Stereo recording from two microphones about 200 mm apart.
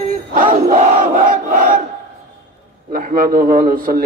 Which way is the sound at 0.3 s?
40° right (ahead or behind).